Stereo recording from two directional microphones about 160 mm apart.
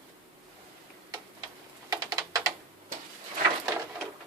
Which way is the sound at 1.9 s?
25° right (ahead or behind).